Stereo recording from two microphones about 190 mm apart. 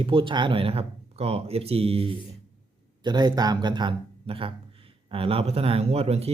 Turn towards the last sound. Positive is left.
turn(degrees=-30)  # may be behind; listen again after turning